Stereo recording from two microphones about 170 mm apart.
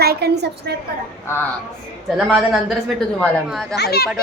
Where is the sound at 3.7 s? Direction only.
70° left (ahead or behind).